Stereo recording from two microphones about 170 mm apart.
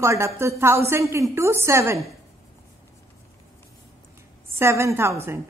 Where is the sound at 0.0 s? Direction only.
15° right (ahead or behind).